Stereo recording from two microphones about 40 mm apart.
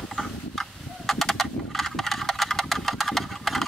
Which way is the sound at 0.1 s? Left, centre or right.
Centre.